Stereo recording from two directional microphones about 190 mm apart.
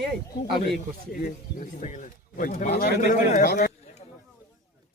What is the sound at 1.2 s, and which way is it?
Speech, 45° left (ahead or behind).